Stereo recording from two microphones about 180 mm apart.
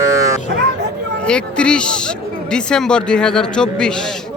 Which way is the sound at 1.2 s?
5° left (ahead or behind).